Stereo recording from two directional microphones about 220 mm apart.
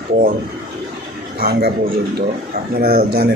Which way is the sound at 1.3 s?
45° right (ahead or behind).